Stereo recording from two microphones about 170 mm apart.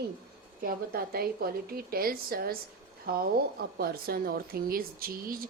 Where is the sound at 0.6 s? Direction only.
60° right (ahead or behind).